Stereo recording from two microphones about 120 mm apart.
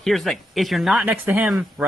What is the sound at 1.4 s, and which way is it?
Speech, 5° right (ahead or behind).